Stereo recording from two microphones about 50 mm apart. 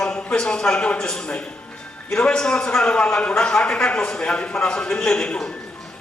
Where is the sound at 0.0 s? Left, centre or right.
Centre.